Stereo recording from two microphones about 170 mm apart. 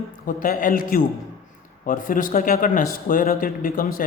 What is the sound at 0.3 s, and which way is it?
Speech, 55° left (ahead or behind).